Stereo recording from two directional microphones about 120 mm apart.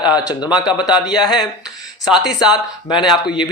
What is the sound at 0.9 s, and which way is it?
Speech, 5° right (ahead or behind).